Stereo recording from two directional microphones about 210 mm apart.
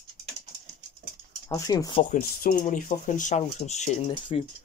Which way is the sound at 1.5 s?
15° left (ahead or behind).